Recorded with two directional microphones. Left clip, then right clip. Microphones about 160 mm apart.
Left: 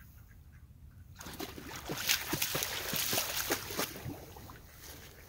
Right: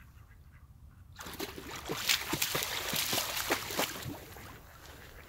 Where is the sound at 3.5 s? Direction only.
5° left (ahead or behind).